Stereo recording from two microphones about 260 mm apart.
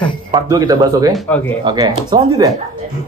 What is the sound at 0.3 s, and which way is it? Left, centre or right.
Speech, centre.